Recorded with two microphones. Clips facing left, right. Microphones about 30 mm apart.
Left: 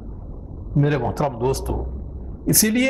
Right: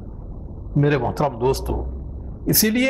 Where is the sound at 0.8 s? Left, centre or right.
Centre.